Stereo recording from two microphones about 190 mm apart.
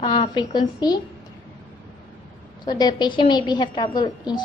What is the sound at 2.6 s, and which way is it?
A woman's voice, 20° left (ahead or behind).